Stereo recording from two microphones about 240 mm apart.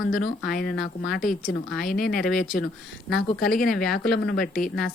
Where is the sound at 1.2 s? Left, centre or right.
Left.